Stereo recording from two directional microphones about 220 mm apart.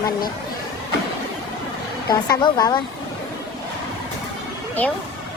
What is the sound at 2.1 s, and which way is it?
Speech, 20° left (ahead or behind).